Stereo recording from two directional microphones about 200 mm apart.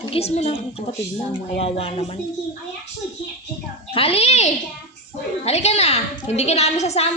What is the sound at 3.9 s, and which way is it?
A woman's voice, 30° left (ahead or behind).